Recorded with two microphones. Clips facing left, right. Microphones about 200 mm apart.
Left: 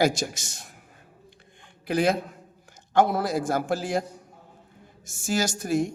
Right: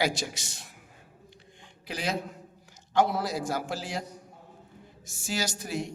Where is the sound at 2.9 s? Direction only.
50° left (ahead or behind).